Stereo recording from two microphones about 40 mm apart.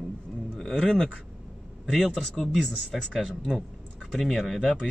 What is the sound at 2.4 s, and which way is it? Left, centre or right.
Speech, centre.